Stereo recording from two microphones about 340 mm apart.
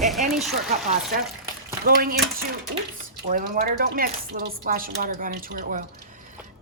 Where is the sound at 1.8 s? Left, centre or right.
Right.